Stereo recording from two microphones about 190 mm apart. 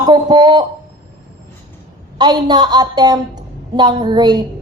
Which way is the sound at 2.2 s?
20° right (ahead or behind).